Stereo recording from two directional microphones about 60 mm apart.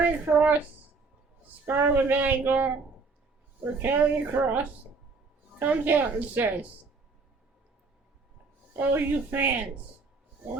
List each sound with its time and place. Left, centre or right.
0.0 s a woman's voice: right
1.6 s a woman's voice: right
8.8 s a woman's voice: right